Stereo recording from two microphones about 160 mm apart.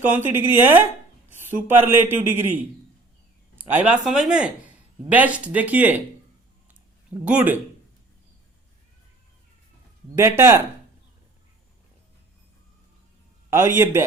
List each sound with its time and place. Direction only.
0.0 s a man's voice: 10° right (ahead or behind)
7.1 s a man's voice: 10° right (ahead or behind)
10.2 s a man's voice: 15° right (ahead or behind)
13.5 s a man's voice: 15° right (ahead or behind)